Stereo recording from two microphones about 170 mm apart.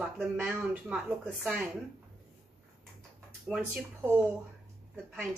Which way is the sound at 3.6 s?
15° right (ahead or behind).